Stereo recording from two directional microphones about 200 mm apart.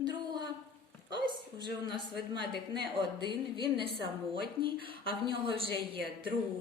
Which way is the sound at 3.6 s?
50° left (ahead or behind).